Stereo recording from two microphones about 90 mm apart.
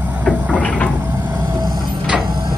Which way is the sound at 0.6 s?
15° left (ahead or behind).